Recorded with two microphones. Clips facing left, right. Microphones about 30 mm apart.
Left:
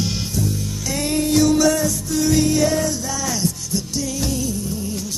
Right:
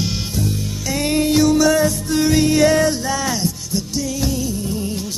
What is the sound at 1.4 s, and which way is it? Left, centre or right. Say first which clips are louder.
Music: right 1 dB; centre.